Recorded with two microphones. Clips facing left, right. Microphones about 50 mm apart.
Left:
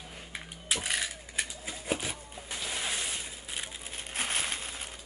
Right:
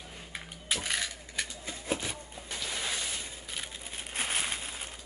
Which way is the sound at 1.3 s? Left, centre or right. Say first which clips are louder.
Left 1 dB; centre.